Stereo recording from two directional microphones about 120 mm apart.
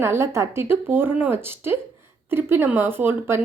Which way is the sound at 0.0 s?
20° right (ahead or behind).